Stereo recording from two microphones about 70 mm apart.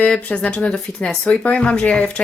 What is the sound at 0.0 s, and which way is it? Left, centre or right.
Speech, left.